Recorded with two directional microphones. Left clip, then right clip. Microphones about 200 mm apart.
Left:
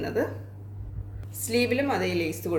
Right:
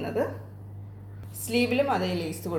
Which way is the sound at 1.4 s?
35° left (ahead or behind).